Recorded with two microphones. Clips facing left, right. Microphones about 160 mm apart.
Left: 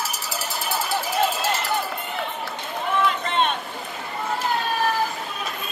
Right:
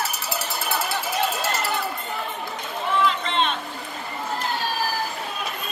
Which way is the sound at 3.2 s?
50° left (ahead or behind).